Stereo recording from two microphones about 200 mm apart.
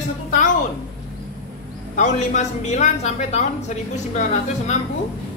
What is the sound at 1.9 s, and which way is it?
Speech, 35° left (ahead or behind).